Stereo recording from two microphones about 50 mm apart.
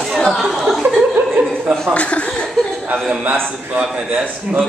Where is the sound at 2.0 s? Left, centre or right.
Left.